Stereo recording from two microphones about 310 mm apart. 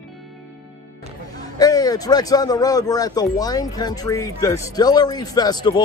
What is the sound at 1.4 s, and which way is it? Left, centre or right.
A man's voice, centre.